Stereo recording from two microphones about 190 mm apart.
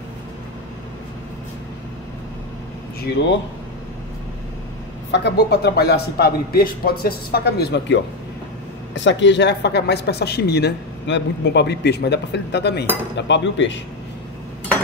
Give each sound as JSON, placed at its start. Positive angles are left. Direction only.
{"t": 5.1, "sound": "speech", "side_deg": 60}
{"t": 8.9, "sound": "speech", "side_deg": 70}
{"t": 13.1, "sound": "cutlery", "side_deg": 70}